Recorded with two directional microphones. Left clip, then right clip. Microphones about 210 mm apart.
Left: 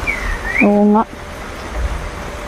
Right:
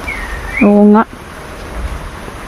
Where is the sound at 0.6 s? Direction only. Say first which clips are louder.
Right 4 dB; 25° right (ahead or behind).